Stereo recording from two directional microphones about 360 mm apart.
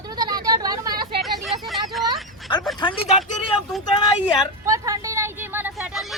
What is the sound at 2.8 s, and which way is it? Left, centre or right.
Speech, centre.